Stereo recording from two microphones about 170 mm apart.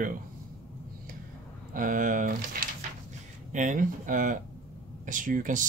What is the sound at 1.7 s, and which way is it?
Speech, 50° right (ahead or behind).